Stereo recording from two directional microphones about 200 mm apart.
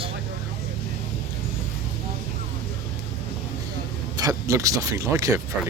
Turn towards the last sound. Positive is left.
turn(degrees=-15)  # may be behind; listen again after turning